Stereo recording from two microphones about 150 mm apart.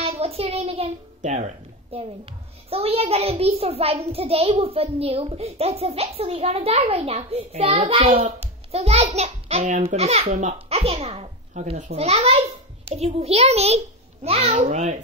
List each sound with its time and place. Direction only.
0.0 s a child's voice: 40° right (ahead or behind)
1.9 s a child's voice: 40° right (ahead or behind)